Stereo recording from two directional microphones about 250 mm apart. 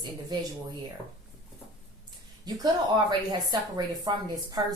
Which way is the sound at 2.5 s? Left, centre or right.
Centre.